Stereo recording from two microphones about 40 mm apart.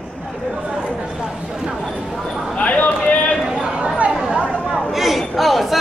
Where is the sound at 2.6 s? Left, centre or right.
Left.